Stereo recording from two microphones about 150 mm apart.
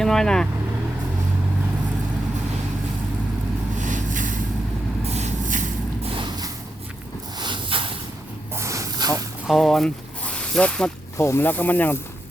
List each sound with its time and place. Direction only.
0.0 s speech: 5° left (ahead or behind)
3.8 s vehicle: 55° right (ahead or behind)
5.0 s vehicle: 45° right (ahead or behind)
6.0 s a sound: 35° right (ahead or behind)
8.5 s snake: 20° right (ahead or behind)
9.5 s speech: centre (ahead or behind)
11.2 s speech: 15° left (ahead or behind)